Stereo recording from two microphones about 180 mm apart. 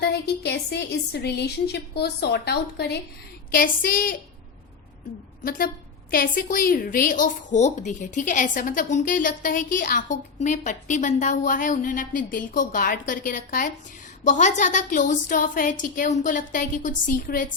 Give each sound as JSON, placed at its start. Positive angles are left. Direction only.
{"t": 0.0, "sound": "a woman's voice", "side_deg": 65}
{"t": 3.5, "sound": "a woman's voice", "side_deg": 50}
{"t": 5.4, "sound": "a woman's voice", "side_deg": 55}